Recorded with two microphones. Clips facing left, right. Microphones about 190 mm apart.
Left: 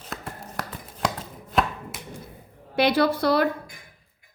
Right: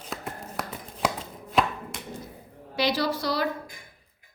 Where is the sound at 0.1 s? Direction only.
Centre (ahead or behind).